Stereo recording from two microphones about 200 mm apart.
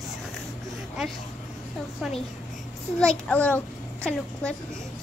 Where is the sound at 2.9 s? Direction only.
5° left (ahead or behind).